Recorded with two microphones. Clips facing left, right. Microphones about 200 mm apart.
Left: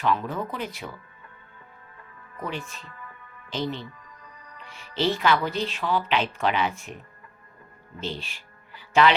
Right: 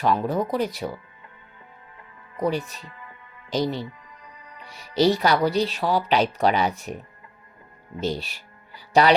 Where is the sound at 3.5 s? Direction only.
40° right (ahead or behind).